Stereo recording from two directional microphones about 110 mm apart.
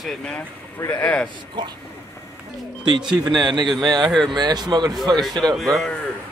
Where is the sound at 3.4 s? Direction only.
40° right (ahead or behind).